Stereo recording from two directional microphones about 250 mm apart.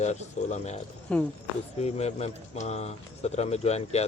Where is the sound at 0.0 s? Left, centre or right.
Left.